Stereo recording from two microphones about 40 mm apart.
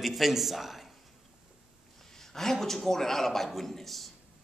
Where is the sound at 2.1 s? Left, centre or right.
Centre.